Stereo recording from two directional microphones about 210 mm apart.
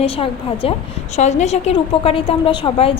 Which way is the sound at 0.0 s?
25° left (ahead or behind).